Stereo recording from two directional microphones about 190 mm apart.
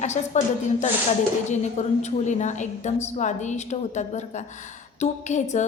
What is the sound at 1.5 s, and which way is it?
A woman's voice, 40° left (ahead or behind).